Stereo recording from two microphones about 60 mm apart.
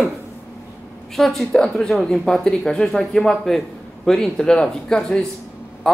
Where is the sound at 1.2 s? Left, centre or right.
Centre.